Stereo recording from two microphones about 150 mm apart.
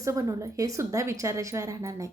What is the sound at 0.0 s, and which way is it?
A woman's voice, 20° right (ahead or behind).